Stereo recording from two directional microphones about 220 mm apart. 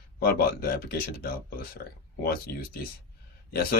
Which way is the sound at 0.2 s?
45° left (ahead or behind).